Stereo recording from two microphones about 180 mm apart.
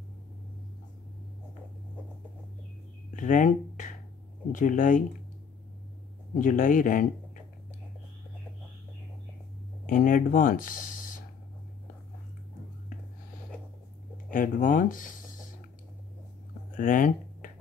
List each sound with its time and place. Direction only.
3.1 s a sound: 45° left (ahead or behind)
4.5 s speech: 45° left (ahead or behind)
6.3 s speech: 50° left (ahead or behind)
9.8 s speech: 50° left (ahead or behind)
14.3 s speech: 50° left (ahead or behind)
16.7 s a sound: 50° left (ahead or behind)